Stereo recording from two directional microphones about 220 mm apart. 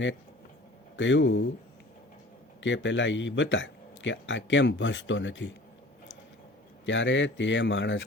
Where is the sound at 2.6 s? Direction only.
55° left (ahead or behind).